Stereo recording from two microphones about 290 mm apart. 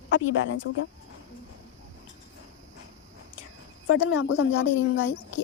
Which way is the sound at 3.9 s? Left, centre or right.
Left.